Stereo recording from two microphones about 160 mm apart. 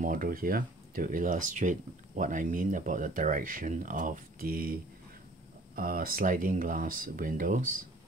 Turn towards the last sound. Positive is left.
turn(degrees=-55)  # may be behind; listen again after turning